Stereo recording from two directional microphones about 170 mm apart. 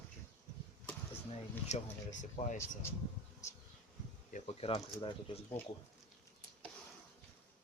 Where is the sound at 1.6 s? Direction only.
45° left (ahead or behind).